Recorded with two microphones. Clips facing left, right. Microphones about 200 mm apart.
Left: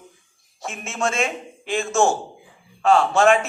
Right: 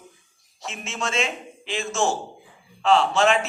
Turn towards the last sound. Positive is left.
turn(degrees=50)  # may be behind; listen again after turning